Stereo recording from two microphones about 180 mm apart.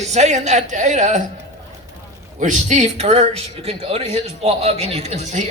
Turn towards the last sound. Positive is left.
turn(degrees=-35)  # may be behind; listen again after turning